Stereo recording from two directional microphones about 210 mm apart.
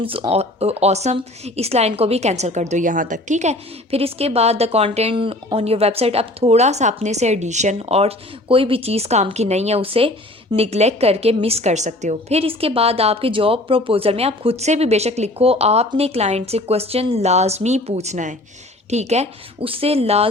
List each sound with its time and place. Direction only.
0.0 s a woman's voice: 25° right (ahead or behind)